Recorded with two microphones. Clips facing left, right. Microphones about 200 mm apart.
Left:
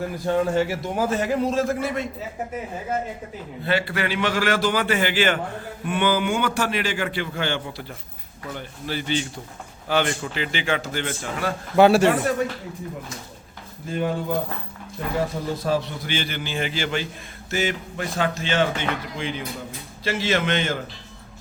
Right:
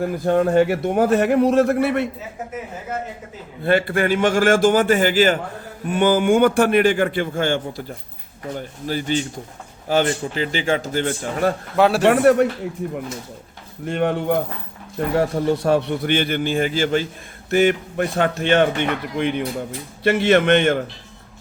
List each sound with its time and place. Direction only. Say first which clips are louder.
0.3 s speech: right 5 dB; 55° right (ahead or behind)
3.6 s a man's voice: right 6 dB; 50° right (ahead or behind)
11.8 s speech: left 2 dB; centre (ahead or behind)
12.0 s speech: right 6 dB; 65° right (ahead or behind)
13.8 s speech: right 5 dB; 70° right (ahead or behind); by 17.1 s 45° right (ahead or behind)
17.5 s speech: right 9 dB; 55° right (ahead or behind)